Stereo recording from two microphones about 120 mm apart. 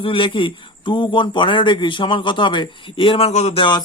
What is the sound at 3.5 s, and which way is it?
Speech, 40° left (ahead or behind).